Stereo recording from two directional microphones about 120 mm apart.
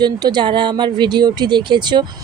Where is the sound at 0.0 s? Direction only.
40° right (ahead or behind).